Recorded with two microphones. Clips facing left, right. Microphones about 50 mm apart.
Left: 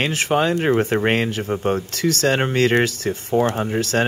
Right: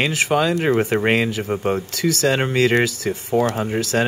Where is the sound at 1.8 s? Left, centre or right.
Left.